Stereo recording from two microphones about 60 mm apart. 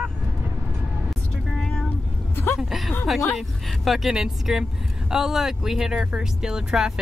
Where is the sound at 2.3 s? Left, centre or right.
Left.